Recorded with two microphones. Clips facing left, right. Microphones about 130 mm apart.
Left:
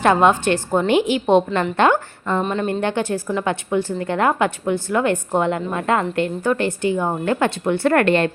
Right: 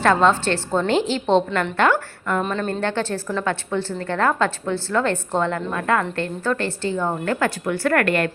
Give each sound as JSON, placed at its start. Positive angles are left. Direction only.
{"t": 0.0, "sound": "a woman's voice", "side_deg": 15}
{"t": 2.4, "sound": "speech", "side_deg": 5}
{"t": 2.8, "sound": "a woman's voice", "side_deg": 15}